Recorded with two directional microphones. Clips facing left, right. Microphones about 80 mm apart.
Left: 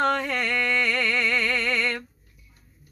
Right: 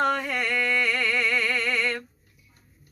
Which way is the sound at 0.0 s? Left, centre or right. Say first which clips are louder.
Left 1 dB; centre.